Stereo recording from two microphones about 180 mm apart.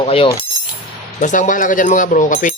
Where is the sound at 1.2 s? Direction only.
45° left (ahead or behind).